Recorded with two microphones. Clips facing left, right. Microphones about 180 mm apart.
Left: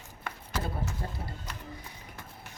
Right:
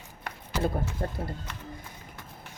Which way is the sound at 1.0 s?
55° right (ahead or behind).